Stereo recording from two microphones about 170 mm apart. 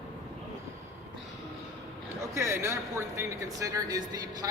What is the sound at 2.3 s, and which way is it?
Speech, 15° right (ahead or behind).